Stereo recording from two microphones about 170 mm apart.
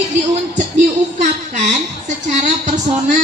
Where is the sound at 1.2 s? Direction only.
45° right (ahead or behind).